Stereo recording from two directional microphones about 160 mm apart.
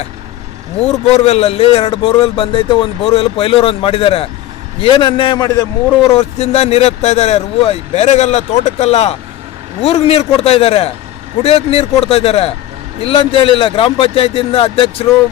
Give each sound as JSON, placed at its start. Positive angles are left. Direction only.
{"t": 0.8, "sound": "a man's voice", "side_deg": 40}
{"t": 6.1, "sound": "speech", "side_deg": 40}